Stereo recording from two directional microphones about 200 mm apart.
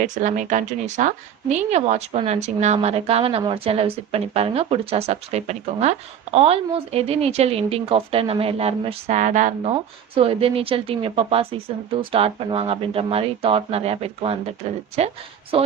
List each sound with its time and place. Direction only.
0.0 s a woman's voice: 40° right (ahead or behind)